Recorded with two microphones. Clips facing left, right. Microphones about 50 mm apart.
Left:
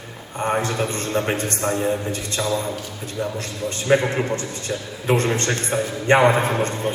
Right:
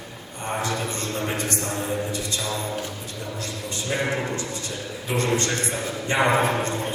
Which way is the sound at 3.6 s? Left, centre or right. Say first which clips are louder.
Left 8 dB; left.